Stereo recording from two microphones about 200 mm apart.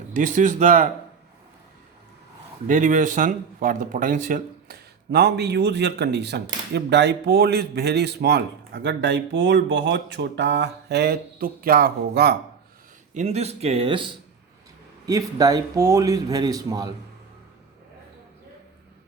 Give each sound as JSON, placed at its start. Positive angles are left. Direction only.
{"t": 0.1, "sound": "speech", "side_deg": -40}
{"t": 2.6, "sound": "speech", "side_deg": -40}
{"t": 13.1, "sound": "speech", "side_deg": -35}